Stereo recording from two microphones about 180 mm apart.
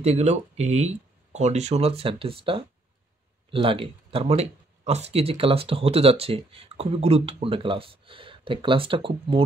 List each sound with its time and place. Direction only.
0.0 s speech: 35° right (ahead or behind)